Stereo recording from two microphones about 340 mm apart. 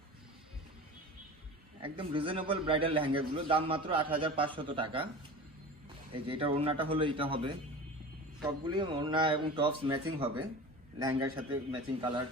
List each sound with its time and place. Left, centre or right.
1.8 s a man's voice: centre
6.2 s a man's voice: centre